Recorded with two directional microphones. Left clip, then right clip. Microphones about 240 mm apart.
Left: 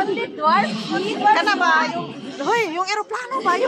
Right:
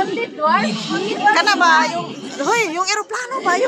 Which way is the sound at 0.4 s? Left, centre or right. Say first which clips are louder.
Right 1 dB; centre.